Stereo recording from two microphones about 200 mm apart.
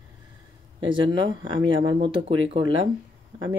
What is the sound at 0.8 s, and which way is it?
Speech, 25° right (ahead or behind).